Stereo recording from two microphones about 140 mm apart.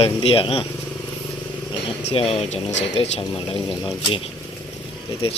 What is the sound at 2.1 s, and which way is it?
Speech, 45° left (ahead or behind).